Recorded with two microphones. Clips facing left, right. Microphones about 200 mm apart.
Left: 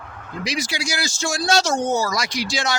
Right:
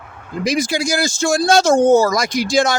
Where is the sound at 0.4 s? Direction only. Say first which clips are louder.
Right 9 dB; 50° right (ahead or behind).